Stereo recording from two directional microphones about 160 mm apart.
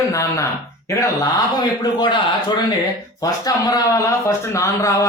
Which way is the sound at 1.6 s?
30° left (ahead or behind).